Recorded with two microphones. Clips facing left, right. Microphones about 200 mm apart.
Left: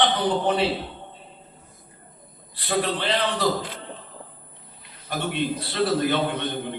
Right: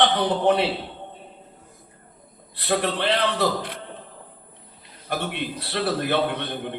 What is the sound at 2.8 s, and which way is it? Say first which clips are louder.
Speech: right 2 dB; 65° right (ahead or behind).